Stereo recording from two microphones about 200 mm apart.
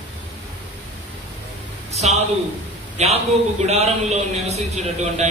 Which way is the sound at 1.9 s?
35° right (ahead or behind).